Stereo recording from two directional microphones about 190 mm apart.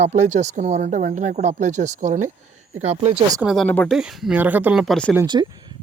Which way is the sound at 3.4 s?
Centre (ahead or behind).